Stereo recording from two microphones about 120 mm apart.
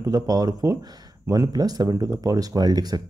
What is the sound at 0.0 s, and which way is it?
Speech, 30° right (ahead or behind).